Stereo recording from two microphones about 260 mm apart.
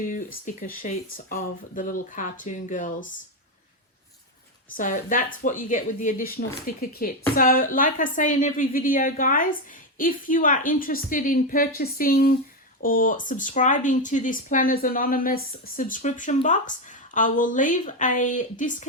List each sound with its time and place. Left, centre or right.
0.0 s a woman's voice: left
4.8 s a woman's voice: left